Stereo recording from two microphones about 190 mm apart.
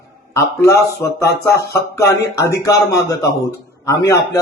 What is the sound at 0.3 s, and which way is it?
Speech, 15° left (ahead or behind).